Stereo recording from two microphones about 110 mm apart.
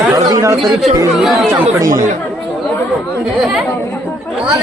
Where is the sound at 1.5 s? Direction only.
25° right (ahead or behind).